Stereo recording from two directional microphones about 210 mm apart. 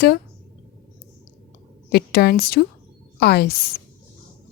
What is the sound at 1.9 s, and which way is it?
Speech, 50° left (ahead or behind).